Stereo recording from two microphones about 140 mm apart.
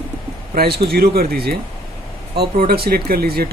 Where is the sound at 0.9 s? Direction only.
90° right.